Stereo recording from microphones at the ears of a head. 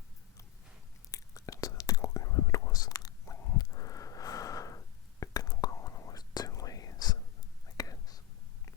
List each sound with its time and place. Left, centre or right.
1.1 s whispering: left